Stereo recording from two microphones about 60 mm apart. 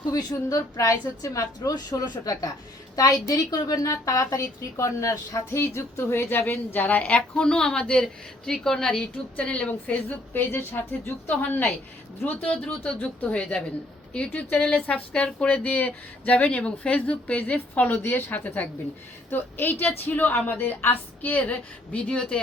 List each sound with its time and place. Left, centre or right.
0.0 s a woman's voice: left
10.3 s a woman's voice: left; by 15.4 s centre
15.4 s a woman's voice: left